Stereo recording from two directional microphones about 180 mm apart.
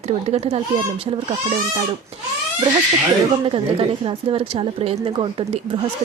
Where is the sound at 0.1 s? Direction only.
35° right (ahead or behind).